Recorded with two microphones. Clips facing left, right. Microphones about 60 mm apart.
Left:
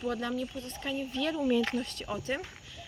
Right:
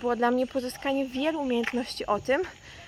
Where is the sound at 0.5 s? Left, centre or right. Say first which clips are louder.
Right 10 dB; right.